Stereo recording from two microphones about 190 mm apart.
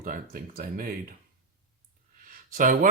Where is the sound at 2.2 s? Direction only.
45° right (ahead or behind).